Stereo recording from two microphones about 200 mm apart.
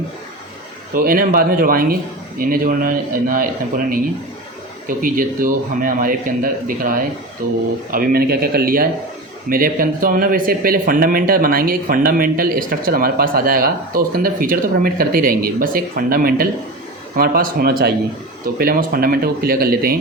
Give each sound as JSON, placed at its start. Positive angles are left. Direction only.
{"t": 0.9, "sound": "speech", "side_deg": -45}